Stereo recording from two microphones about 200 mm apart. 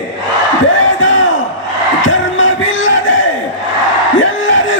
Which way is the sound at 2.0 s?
70° left (ahead or behind).